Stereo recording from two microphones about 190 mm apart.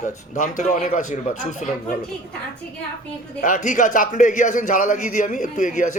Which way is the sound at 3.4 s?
40° left (ahead or behind).